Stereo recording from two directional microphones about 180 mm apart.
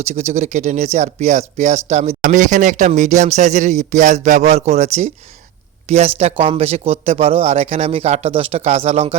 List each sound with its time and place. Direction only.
0.0 s speech: 40° right (ahead or behind)